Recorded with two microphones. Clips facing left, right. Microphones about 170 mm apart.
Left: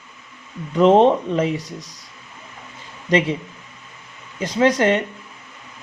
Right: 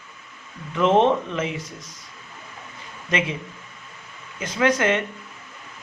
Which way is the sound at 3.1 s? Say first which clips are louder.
Left 7 dB; 35° left (ahead or behind).